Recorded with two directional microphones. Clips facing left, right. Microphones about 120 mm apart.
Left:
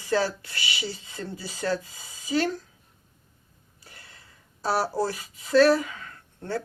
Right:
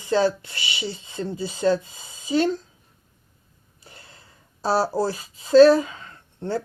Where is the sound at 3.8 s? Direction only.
25° right (ahead or behind).